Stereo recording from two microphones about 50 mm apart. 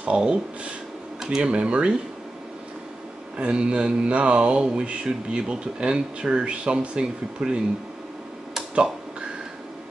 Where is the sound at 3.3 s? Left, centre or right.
Right.